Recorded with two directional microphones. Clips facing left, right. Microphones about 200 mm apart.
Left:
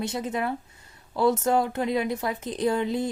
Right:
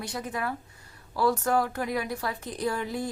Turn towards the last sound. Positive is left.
turn(degrees=20)  # may be behind; listen again after turning